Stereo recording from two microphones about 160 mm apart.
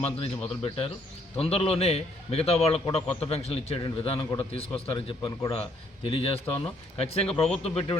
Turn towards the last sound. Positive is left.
turn(degrees=40)  # may be behind; listen again after turning